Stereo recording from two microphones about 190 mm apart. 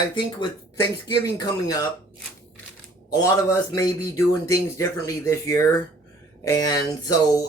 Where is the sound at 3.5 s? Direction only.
20° left (ahead or behind).